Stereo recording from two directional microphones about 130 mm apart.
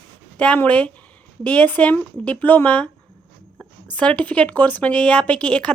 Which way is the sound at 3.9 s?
10° left (ahead or behind).